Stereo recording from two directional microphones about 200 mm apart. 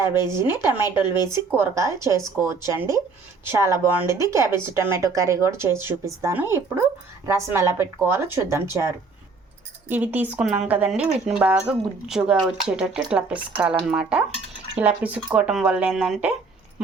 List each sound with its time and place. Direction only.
0.0 s speech: 15° right (ahead or behind)
0.9 s speech: 25° left (ahead or behind)
1.3 s speech: 10° right (ahead or behind)
9.9 s speech: 10° right (ahead or behind)